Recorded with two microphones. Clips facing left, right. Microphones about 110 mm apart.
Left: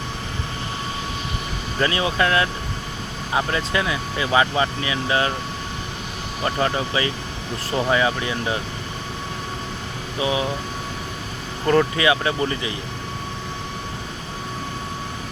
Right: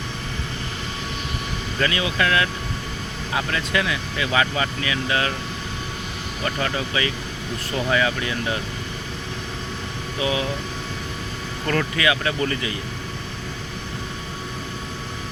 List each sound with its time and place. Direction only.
1.8 s speech: 30° left (ahead or behind)
6.4 s speech: 25° left (ahead or behind)
10.2 s speech: 25° left (ahead or behind)
11.6 s speech: 20° left (ahead or behind)